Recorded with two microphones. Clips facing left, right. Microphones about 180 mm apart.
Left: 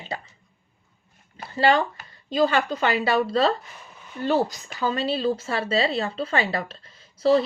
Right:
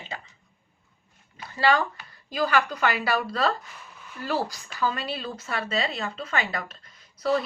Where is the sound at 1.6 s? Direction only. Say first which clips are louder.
Left 3 dB; 25° left (ahead or behind).